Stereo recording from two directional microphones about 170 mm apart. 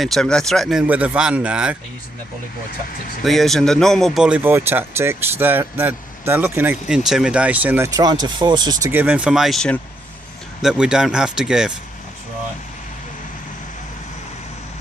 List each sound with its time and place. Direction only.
0.0 s speech: centre (ahead or behind)
3.2 s speech: centre (ahead or behind)
7.9 s speech: 25° right (ahead or behind)
8.9 s speech: 10° right (ahead or behind)